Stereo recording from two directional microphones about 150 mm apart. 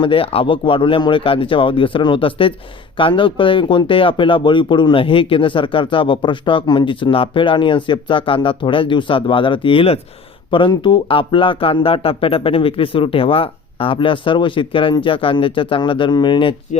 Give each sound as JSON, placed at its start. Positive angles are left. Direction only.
{"t": 0.0, "sound": "speech", "side_deg": 35}